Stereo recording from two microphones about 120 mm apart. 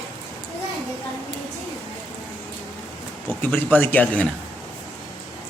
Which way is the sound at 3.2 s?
15° left (ahead or behind).